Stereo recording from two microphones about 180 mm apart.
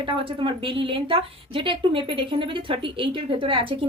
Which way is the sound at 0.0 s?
30° right (ahead or behind).